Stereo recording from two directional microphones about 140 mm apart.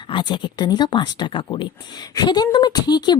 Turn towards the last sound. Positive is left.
turn(degrees=30)  # may be behind; listen again after turning